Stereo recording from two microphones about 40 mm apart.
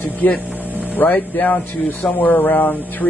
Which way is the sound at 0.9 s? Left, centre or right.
Left.